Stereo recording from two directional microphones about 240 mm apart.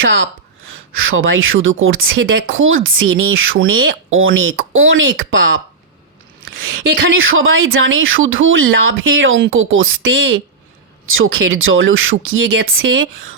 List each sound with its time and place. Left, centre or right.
0.0 s speech: right
7.1 s speech: right